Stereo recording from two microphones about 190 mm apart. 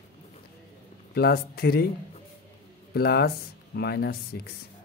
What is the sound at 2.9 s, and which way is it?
Speech, 55° left (ahead or behind).